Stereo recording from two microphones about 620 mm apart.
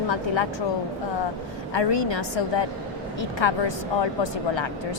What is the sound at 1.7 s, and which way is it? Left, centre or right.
A woman's voice, left.